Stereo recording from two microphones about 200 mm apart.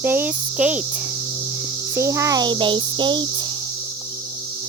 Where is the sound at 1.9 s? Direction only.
15° right (ahead or behind).